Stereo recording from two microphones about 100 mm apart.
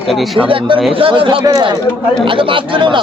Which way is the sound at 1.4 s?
40° right (ahead or behind).